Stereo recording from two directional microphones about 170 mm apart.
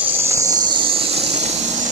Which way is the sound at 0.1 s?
20° right (ahead or behind).